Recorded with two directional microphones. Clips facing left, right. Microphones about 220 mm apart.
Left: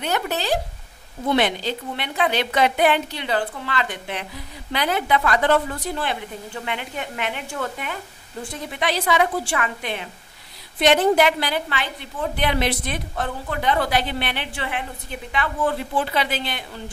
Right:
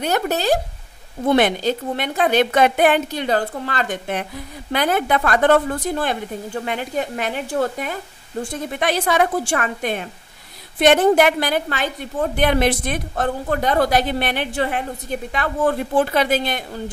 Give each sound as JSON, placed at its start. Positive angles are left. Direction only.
{"t": 0.0, "sound": "a woman's voice", "side_deg": -45}